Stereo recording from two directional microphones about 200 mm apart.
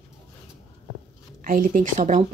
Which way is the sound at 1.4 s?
45° right (ahead or behind).